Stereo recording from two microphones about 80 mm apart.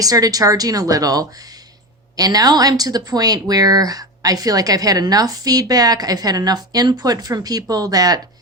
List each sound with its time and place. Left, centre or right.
0.0 s speech: right